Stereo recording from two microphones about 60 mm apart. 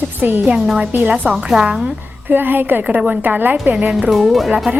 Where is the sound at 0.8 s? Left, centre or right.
Right.